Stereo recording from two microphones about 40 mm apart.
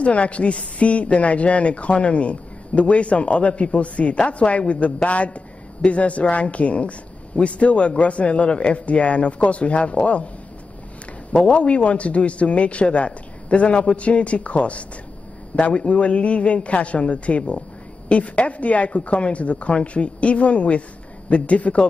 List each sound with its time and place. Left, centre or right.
0.0 s speech: left
11.3 s speech: left